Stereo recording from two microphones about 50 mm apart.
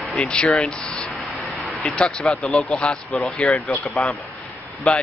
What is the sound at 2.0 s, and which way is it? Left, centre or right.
Speech, centre.